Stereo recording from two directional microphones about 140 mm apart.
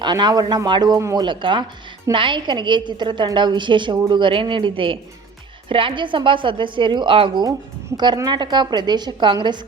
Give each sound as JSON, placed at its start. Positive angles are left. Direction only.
{"t": 0.0, "sound": "a woman's voice", "side_deg": -30}
{"t": 1.2, "sound": "a woman's voice", "side_deg": -35}